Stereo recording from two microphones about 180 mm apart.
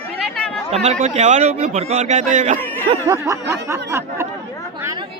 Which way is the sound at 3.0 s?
15° right (ahead or behind).